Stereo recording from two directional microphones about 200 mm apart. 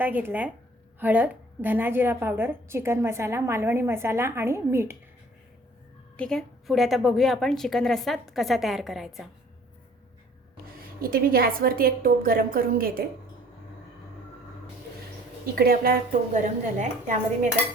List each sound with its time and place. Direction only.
0.0 s a woman's voice: 10° right (ahead or behind)
6.1 s a woman's voice: 5° left (ahead or behind)
11.0 s a woman's voice: 50° right (ahead or behind)
15.5 s a woman's voice: 45° right (ahead or behind)